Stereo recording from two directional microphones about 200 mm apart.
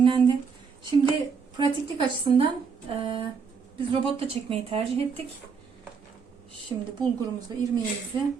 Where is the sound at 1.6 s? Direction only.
25° right (ahead or behind).